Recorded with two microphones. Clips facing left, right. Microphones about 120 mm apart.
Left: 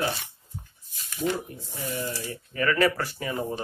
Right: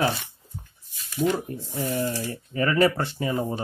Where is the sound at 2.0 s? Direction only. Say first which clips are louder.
Right 5 dB; 30° right (ahead or behind).